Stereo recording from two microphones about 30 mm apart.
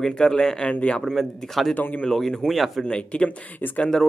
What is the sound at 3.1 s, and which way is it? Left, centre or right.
Speech, left.